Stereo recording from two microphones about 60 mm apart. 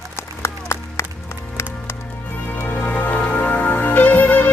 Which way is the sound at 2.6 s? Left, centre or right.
Left.